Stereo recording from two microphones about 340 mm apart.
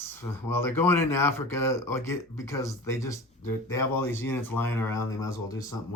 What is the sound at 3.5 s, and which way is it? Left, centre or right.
Speech, left.